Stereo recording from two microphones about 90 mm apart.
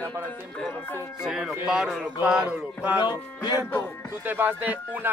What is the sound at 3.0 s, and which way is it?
Speech, 50° left (ahead or behind).